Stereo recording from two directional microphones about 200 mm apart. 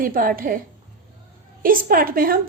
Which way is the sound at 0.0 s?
45° right (ahead or behind).